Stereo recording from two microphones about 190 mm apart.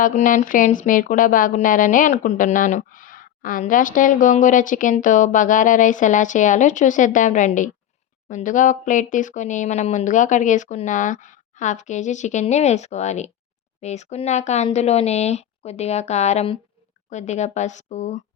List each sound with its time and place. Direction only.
0.0 s speech: 45° left (ahead or behind)